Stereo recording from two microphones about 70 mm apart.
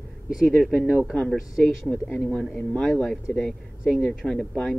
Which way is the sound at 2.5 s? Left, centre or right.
Centre.